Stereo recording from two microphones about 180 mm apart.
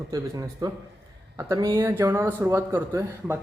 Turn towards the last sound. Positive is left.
turn(degrees=-15)  # may be behind; listen again after turning